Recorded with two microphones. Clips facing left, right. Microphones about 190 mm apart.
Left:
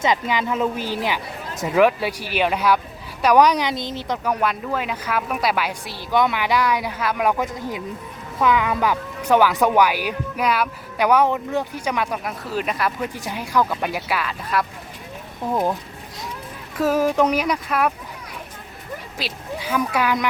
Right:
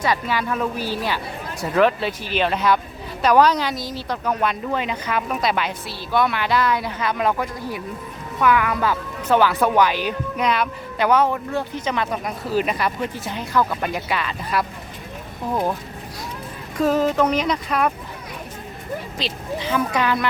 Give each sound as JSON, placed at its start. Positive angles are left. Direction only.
{"t": 0.0, "sound": "a woman's voice", "side_deg": 20}
{"t": 12.5, "sound": "speech", "side_deg": 0}
{"t": 13.1, "sound": "a woman's voice", "side_deg": 15}
{"t": 16.7, "sound": "a woman's voice", "side_deg": 5}
{"t": 19.2, "sound": "a woman's voice", "side_deg": 10}